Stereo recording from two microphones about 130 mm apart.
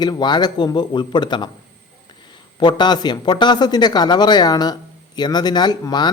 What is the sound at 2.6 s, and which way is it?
Speech, 35° left (ahead or behind).